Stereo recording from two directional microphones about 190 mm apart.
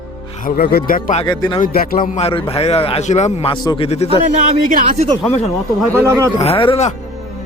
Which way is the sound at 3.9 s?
35° left (ahead or behind).